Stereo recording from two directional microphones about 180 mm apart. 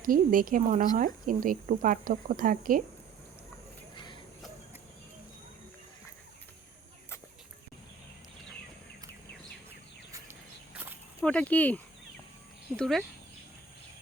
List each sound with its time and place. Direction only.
0.0 s speech: 50° right (ahead or behind)
3.9 s a sound: 25° left (ahead or behind)
10.8 s walk: 10° right (ahead or behind)
11.3 s speech: 5° left (ahead or behind)